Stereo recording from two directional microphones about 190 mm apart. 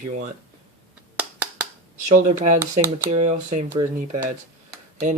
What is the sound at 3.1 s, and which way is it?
Speech, 35° right (ahead or behind).